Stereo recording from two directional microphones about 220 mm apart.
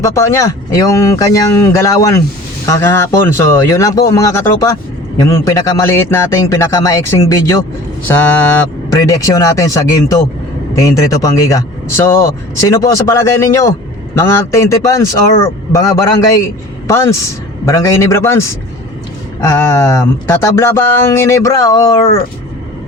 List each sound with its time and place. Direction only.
0.0 s a woman's voice: 15° left (ahead or behind)